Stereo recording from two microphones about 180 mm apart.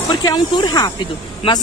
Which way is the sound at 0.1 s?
25° left (ahead or behind).